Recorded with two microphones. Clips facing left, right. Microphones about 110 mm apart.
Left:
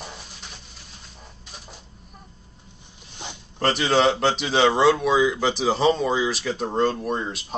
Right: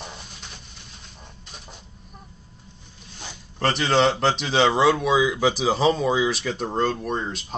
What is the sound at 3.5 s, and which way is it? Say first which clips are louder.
Speech: even; centre (ahead or behind).